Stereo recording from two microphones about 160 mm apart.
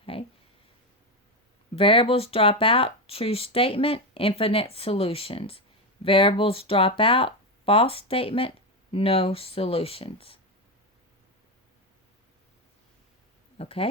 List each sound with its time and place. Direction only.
0.0 s a sound: 35° left (ahead or behind)
1.7 s speech: 35° left (ahead or behind)
13.6 s speech: 35° left (ahead or behind)